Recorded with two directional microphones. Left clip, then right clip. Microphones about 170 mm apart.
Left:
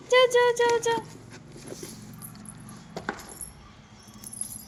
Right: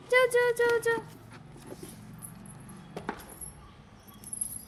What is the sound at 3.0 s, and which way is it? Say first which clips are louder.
Keys jangling: left 4 dB; 40° left (ahead or behind).